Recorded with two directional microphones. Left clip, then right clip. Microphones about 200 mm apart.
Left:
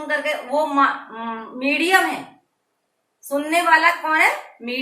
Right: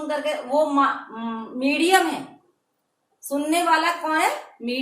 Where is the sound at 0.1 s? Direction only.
15° right (ahead or behind).